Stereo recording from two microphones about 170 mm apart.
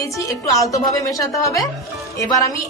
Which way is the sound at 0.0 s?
20° left (ahead or behind).